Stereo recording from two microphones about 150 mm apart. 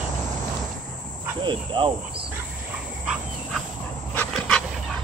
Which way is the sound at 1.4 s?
30° right (ahead or behind).